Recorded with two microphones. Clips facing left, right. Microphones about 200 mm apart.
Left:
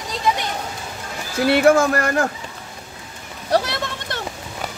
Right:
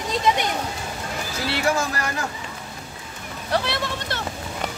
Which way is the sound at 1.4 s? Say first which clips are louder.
Left 10 dB; 55° left (ahead or behind).